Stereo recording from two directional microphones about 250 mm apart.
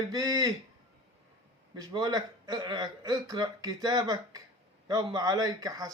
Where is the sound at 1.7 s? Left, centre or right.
Centre.